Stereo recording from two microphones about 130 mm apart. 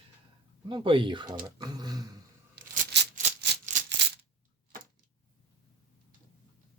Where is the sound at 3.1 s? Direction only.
75° right (ahead or behind).